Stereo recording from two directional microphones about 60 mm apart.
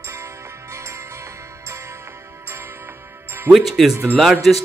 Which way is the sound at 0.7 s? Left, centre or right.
Right.